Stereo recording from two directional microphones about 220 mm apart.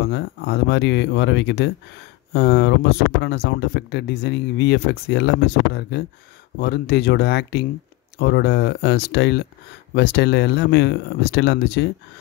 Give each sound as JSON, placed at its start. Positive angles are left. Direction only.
{"t": 0.0, "sound": "speech", "side_deg": 50}